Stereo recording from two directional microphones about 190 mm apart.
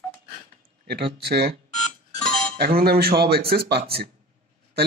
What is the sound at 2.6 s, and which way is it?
Speech, 55° right (ahead or behind).